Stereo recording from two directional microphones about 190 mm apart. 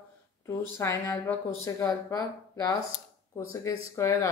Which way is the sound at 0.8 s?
15° left (ahead or behind).